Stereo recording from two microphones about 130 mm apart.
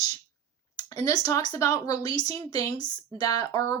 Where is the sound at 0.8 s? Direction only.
30° left (ahead or behind).